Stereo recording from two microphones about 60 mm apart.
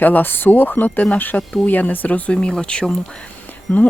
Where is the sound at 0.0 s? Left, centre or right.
Left; by 2.9 s centre.